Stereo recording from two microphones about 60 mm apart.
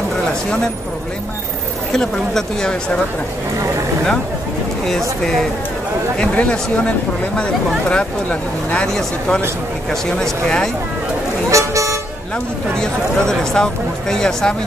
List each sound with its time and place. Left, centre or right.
1.9 s speech: centre
5.2 s speech: centre
6.1 s speech: centre
7.9 s speech: left
8.8 s speech: centre
11.5 s toot: right
12.7 s speech: centre